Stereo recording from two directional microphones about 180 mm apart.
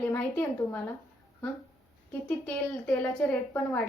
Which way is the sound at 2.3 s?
5° left (ahead or behind).